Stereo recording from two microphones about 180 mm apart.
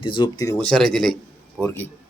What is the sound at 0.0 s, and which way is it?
Speech, 25° left (ahead or behind).